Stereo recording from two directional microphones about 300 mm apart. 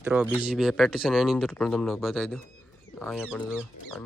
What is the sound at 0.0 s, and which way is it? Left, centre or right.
Speech, centre.